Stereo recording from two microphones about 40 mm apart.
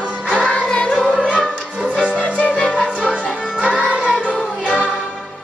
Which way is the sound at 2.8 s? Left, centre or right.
Right.